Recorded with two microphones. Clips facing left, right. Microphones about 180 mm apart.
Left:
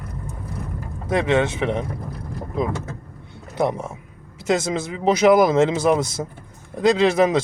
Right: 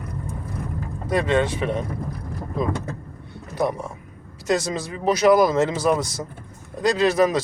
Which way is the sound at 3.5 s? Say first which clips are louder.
Left 2 dB; 20° left (ahead or behind).